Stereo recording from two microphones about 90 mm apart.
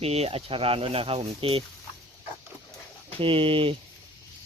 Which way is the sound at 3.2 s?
90° right.